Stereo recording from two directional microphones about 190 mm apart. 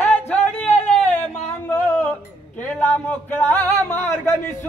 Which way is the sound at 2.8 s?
10° left (ahead or behind).